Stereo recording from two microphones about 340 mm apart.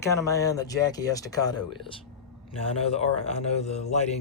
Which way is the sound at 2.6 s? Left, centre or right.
Centre.